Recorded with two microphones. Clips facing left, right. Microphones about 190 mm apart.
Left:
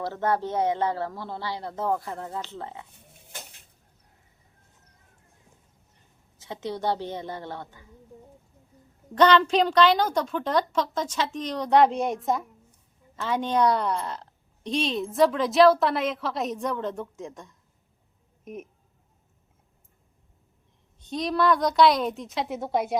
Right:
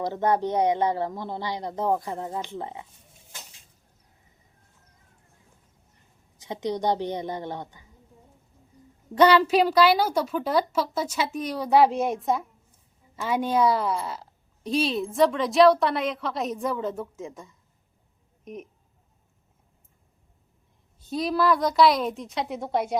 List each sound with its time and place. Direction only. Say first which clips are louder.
0.0 s a woman's voice: right 2 dB; 15° right (ahead or behind)
3.2 s dishes: left 4 dB; 60° left (ahead or behind)
6.4 s a woman's voice: right 3 dB; 15° right (ahead or behind)
9.1 s a woman's voice: right 1 dB; 10° right (ahead or behind)
21.0 s a woman's voice: right 1 dB; 5° right (ahead or behind)